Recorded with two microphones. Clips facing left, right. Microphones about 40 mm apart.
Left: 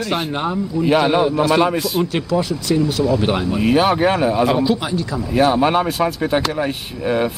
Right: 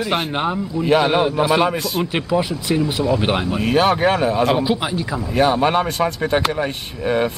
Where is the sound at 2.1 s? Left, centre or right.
Right.